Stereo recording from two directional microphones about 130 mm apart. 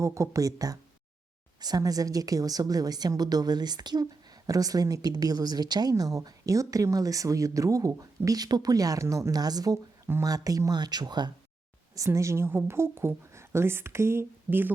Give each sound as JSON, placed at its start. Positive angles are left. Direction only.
{"t": 0.0, "sound": "speech", "side_deg": -25}
{"t": 11.9, "sound": "speech", "side_deg": -25}